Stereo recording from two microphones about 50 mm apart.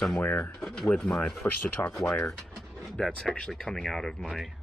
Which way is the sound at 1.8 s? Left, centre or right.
Left.